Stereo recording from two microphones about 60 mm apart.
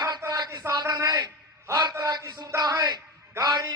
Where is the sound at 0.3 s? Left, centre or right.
Right.